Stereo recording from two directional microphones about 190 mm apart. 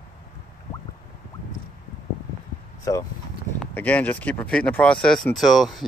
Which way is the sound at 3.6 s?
10° left (ahead or behind).